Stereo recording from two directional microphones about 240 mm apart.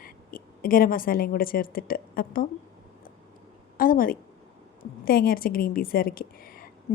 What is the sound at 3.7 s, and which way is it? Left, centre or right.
A woman's voice, left.